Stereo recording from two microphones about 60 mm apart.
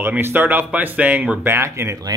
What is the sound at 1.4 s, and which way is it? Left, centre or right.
Speech, right.